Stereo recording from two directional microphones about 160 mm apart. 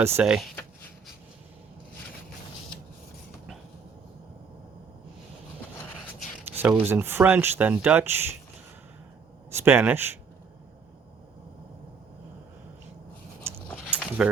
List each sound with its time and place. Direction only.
0.0 s speech: 10° right (ahead or behind)
6.5 s speech: 10° right (ahead or behind)
9.6 s speech: 15° right (ahead or behind)
13.5 s a sound: 15° right (ahead or behind)